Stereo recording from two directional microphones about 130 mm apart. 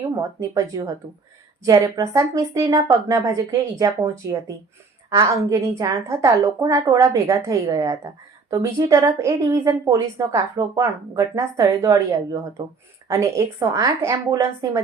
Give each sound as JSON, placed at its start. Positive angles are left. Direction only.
{"t": 0.2, "sound": "a woman's voice", "side_deg": -25}